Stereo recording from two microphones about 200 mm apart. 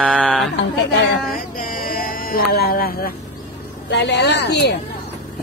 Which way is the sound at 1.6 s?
45° left (ahead or behind).